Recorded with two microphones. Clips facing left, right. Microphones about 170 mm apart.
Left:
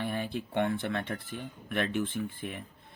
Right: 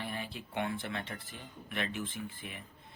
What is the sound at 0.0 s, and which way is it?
Speech, 55° left (ahead or behind).